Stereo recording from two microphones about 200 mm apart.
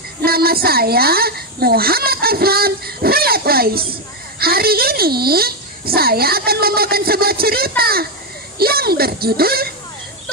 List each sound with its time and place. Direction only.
0.2 s a child's voice: 50° right (ahead or behind)